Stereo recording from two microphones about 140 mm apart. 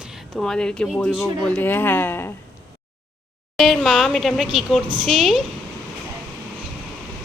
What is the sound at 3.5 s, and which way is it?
A woman's voice, centre (ahead or behind).